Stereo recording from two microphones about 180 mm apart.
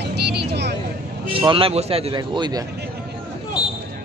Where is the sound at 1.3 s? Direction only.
30° right (ahead or behind).